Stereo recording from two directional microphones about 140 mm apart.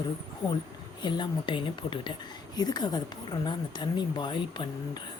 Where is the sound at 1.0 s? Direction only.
35° left (ahead or behind).